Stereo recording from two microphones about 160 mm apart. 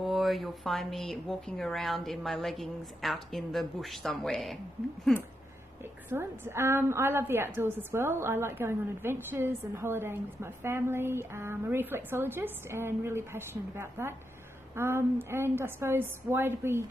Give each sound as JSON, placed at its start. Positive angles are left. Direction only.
{"t": 0.0, "sound": "speech", "side_deg": 0}
{"t": 6.0, "sound": "a woman's voice", "side_deg": -15}